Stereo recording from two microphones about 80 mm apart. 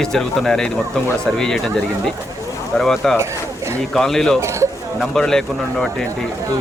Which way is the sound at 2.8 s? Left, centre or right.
Centre.